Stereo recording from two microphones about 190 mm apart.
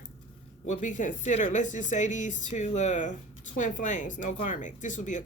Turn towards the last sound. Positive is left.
turn(degrees=40)  # may be behind; listen again after turning